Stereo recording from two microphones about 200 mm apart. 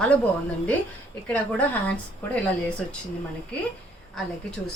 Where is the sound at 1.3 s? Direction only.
5° left (ahead or behind).